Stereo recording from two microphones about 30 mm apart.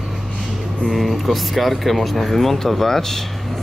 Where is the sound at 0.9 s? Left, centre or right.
Centre.